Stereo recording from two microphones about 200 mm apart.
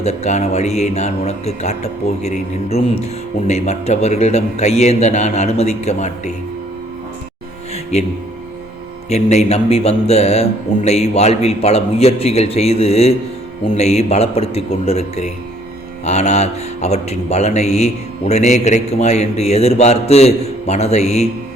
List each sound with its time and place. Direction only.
0.0 s speech: 35° left (ahead or behind)
9.0 s speech: 35° left (ahead or behind)